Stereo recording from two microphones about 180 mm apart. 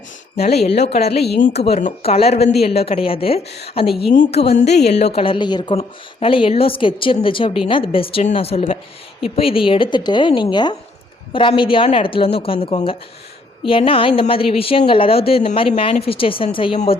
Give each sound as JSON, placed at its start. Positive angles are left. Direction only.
{"t": 0.3, "sound": "speech", "side_deg": 35}
{"t": 1.2, "sound": "a woman's voice", "side_deg": 55}
{"t": 1.6, "sound": "a woman's voice", "side_deg": 35}